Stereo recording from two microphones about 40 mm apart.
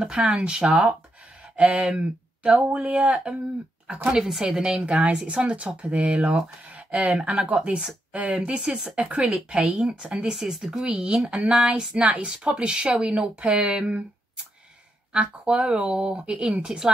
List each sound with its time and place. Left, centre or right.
0.0 s speech: right
1.6 s speech: right
1.9 s speech: right
2.7 s speech: right
3.8 s speech: right
8.5 s speech: centre
10.3 s a woman's voice: centre
10.9 s speech: right
13.4 s speech: right
15.1 s a woman's voice: right